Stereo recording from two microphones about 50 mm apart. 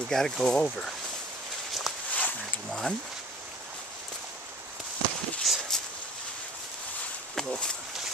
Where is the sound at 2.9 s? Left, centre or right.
Left.